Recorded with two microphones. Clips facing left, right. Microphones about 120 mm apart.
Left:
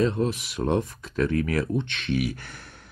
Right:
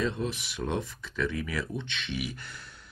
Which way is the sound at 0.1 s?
50° left (ahead or behind).